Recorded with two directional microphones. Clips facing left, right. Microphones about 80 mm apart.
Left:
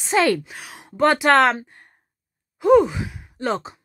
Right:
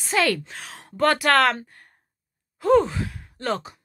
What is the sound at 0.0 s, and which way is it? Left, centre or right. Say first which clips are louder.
Speech: left 4 dB; left.